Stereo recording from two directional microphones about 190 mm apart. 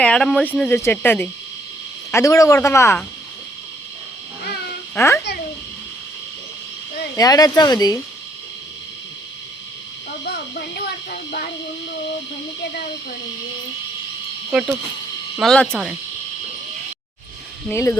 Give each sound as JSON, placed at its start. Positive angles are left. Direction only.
{"t": 0.0, "sound": "speech", "side_deg": 5}
{"t": 4.9, "sound": "speech", "side_deg": 15}
{"t": 7.2, "sound": "speech", "side_deg": 20}
{"t": 10.2, "sound": "a sound", "side_deg": 55}
{"t": 15.4, "sound": "speech", "side_deg": 5}
{"t": 17.7, "sound": "speech", "side_deg": 15}